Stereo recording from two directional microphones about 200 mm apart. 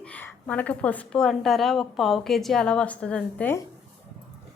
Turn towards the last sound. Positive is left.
turn(degrees=10)  # may be behind; listen again after turning